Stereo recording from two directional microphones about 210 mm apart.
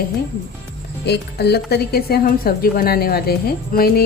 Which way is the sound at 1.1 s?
50° left (ahead or behind).